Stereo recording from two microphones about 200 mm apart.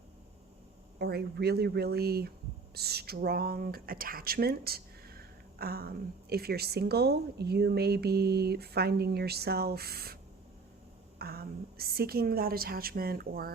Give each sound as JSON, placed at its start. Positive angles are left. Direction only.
{"t": 0.9, "sound": "speech", "side_deg": -55}
{"t": 11.2, "sound": "speech", "side_deg": -50}